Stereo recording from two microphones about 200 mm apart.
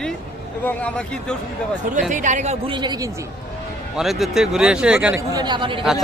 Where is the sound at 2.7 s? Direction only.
20° right (ahead or behind).